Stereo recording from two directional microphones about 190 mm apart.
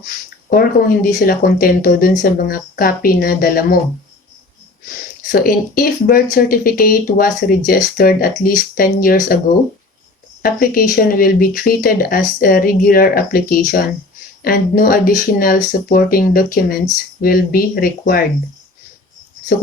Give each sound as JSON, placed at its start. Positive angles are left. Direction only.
{"t": 0.5, "sound": "speech", "side_deg": 50}
{"t": 5.3, "sound": "speech", "side_deg": 50}
{"t": 10.4, "sound": "speech", "side_deg": 50}